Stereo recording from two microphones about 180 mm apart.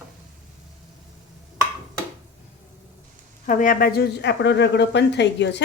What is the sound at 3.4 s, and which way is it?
Speech, 45° left (ahead or behind).